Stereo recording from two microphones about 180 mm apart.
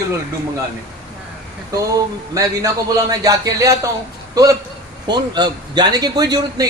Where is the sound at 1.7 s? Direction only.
20° right (ahead or behind).